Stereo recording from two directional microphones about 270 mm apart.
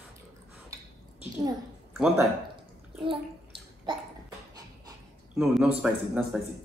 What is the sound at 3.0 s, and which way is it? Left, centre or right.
Bathtub, centre.